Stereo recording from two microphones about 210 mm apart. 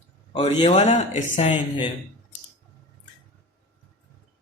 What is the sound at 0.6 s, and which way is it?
Speech, 35° left (ahead or behind).